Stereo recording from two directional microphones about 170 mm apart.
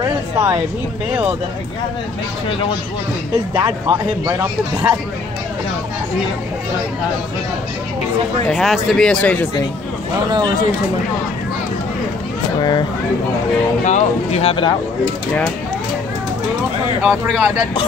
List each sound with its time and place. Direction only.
0.0 s a sound: 10° right (ahead or behind)
3.5 s speech: 15° right (ahead or behind)
8.5 s speech: centre (ahead or behind)
12.5 s speech: 25° left (ahead or behind)
13.8 s speech: 40° left (ahead or behind)
17.0 s speech: centre (ahead or behind)